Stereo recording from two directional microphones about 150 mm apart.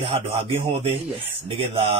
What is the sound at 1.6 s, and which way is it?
Speech, 40° right (ahead or behind).